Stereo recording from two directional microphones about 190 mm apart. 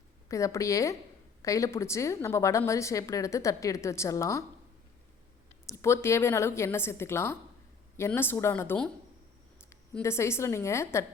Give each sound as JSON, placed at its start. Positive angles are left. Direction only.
{"t": 0.3, "sound": "a woman's voice", "side_deg": 15}
{"t": 5.6, "sound": "a woman's voice", "side_deg": 15}
{"t": 9.9, "sound": "a woman's voice", "side_deg": 15}